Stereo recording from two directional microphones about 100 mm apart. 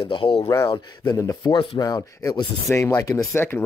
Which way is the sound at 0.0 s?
65° left (ahead or behind).